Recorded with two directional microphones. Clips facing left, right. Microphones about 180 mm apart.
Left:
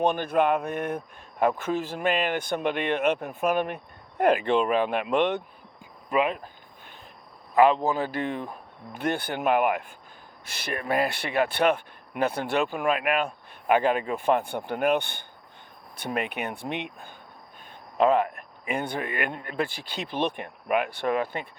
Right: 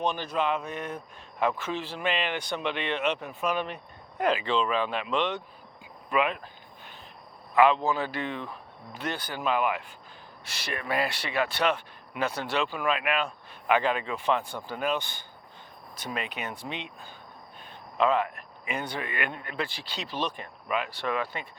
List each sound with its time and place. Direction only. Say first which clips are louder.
0.0 s speech: left 5 dB; 60° left (ahead or behind)
6.1 s speech: left 2 dB; 35° left (ahead or behind)
7.5 s a man's voice: left 2 dB; 40° left (ahead or behind); by 17.1 s 60° left (ahead or behind)
17.9 s a man's voice: left 4 dB; 50° left (ahead or behind)